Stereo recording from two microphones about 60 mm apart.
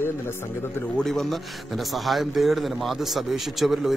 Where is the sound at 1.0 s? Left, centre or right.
Centre.